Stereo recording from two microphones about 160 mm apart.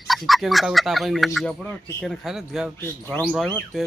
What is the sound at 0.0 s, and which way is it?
Speech, centre (ahead or behind).